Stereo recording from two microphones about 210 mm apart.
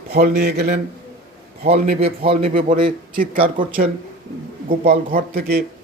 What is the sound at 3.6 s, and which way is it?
Speech, 25° right (ahead or behind).